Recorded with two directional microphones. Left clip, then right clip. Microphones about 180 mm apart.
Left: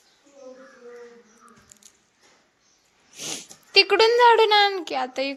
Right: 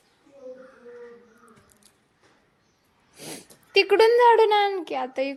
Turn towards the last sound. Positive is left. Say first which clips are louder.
# left 1 dB
turn(degrees=-15)  # may be behind; listen again after turning